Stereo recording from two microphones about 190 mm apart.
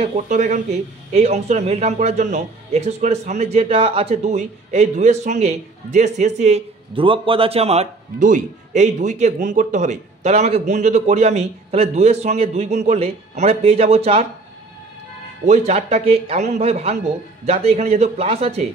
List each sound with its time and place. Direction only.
0.0 s speech: 35° right (ahead or behind)
15.4 s speech: 35° right (ahead or behind)